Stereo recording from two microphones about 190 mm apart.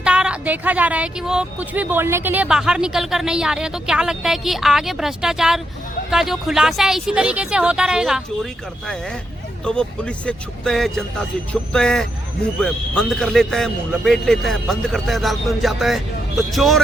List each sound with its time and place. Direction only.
0.0 s a woman's voice: 5° right (ahead or behind)
9.6 s a woman's voice: 5° left (ahead or behind)